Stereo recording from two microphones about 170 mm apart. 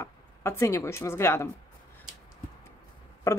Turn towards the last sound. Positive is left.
turn(degrees=15)  # may be behind; listen again after turning